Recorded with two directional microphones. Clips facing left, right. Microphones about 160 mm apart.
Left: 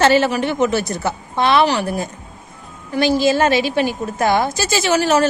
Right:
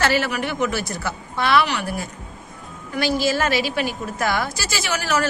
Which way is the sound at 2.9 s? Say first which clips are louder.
Left 6 dB; 20° left (ahead or behind).